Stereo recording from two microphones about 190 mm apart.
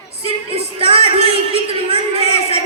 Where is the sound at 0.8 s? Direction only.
30° right (ahead or behind).